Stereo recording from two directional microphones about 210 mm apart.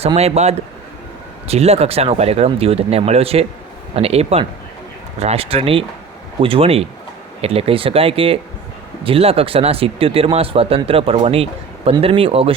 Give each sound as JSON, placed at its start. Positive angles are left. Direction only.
{"t": 0.0, "sound": "speech", "side_deg": -30}